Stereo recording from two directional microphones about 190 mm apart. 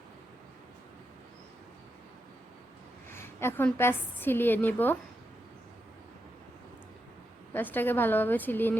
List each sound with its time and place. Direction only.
3.1 s a woman's voice: 10° left (ahead or behind)
7.5 s a woman's voice: 10° left (ahead or behind)